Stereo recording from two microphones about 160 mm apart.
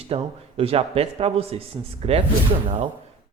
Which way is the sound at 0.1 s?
40° right (ahead or behind).